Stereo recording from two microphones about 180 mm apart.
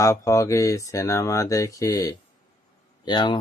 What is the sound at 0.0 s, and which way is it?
Speech, 15° left (ahead or behind).